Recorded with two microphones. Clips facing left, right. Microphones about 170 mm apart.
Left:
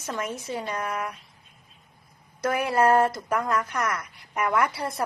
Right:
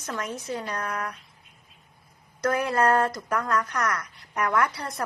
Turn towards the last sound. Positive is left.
turn(degrees=10)  # may be behind; listen again after turning